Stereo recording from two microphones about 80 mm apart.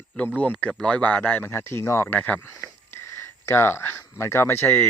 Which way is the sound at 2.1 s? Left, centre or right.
Centre.